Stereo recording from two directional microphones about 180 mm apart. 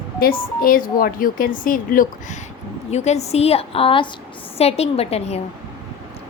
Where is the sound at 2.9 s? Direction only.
40° left (ahead or behind).